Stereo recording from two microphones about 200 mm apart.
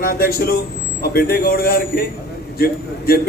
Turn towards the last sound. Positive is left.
turn(degrees=50)  # may be behind; listen again after turning